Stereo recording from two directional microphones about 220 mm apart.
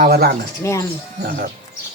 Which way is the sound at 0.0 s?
45° right (ahead or behind).